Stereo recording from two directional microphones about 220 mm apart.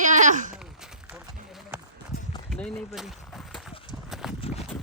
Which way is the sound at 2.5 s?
Centre (ahead or behind).